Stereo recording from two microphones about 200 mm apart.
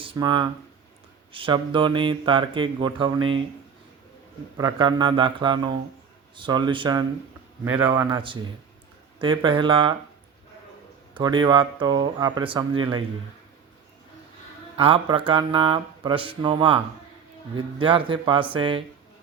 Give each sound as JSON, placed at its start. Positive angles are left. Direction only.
{"t": 0.0, "sound": "speech", "side_deg": -25}
{"t": 4.5, "sound": "speech", "side_deg": -20}
{"t": 7.6, "sound": "speech", "side_deg": -10}
{"t": 7.9, "sound": "speech", "side_deg": -20}
{"t": 11.1, "sound": "speech", "side_deg": -20}
{"t": 14.8, "sound": "speech", "side_deg": -25}